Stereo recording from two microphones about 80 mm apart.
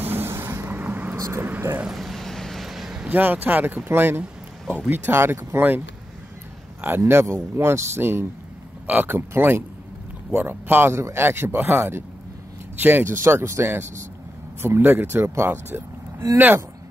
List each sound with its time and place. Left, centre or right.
0.0 s vehicle: right
1.3 s speech: right
1.9 s vehicle: centre
3.1 s speech: right
7.0 s speech: right